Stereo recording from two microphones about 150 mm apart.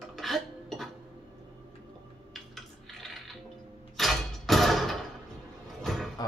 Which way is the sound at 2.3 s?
Centre (ahead or behind).